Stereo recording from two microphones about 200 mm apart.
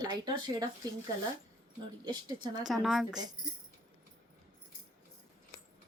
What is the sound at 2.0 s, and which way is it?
Speech, 20° right (ahead or behind).